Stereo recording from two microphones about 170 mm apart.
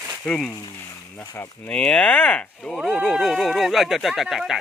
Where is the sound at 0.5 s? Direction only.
20° left (ahead or behind).